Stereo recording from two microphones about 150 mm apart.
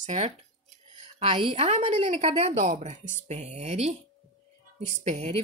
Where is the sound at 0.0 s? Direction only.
50° right (ahead or behind).